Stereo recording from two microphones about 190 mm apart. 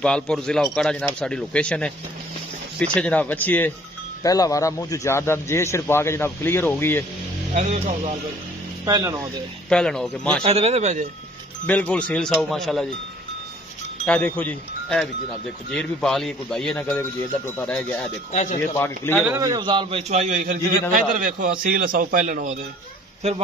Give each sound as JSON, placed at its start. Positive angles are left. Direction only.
{"t": 0.0, "sound": "speech", "side_deg": 5}
{"t": 7.5, "sound": "speech", "side_deg": -40}
{"t": 8.8, "sound": "speech", "side_deg": -15}
{"t": 9.7, "sound": "speech", "side_deg": 5}
{"t": 10.4, "sound": "speech", "side_deg": -35}
{"t": 11.6, "sound": "speech", "side_deg": 5}
{"t": 14.0, "sound": "speech", "side_deg": 10}
{"t": 18.3, "sound": "speech", "side_deg": 40}
{"t": 18.6, "sound": "speech", "side_deg": 10}
{"t": 19.2, "sound": "a man's voice", "side_deg": -15}